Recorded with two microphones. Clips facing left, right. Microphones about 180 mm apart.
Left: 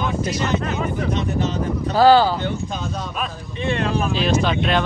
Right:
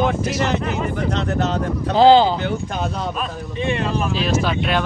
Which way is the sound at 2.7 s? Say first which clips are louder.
Right 3 dB; 70° right (ahead or behind).